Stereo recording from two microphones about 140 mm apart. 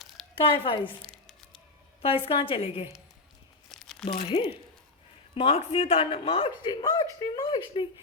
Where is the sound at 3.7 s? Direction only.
5° left (ahead or behind).